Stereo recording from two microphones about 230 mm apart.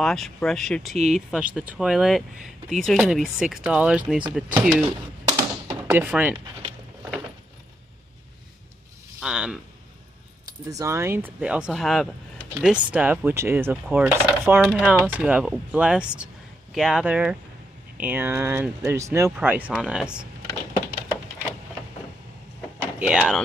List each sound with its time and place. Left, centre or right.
0.0 s mechanisms: centre
0.9 s speech: right
1.3 s mechanisms: centre
5.3 s tap: centre
9.2 s a sound: centre
10.7 s speech: centre
12.6 s mechanisms: centre
17.9 s speech: centre
19.7 s mechanisms: centre
22.9 s speech: centre